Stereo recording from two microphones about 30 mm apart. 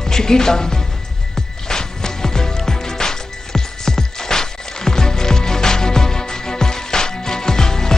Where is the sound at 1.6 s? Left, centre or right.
Left.